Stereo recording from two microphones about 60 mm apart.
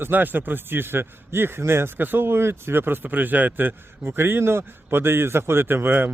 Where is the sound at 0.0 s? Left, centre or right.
Right.